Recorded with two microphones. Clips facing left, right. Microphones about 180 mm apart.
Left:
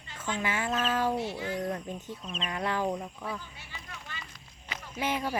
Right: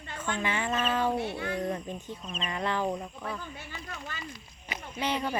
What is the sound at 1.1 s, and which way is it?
Speech, 60° right (ahead or behind).